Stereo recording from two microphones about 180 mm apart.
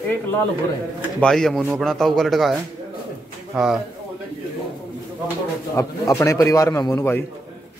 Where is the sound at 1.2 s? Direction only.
5° left (ahead or behind).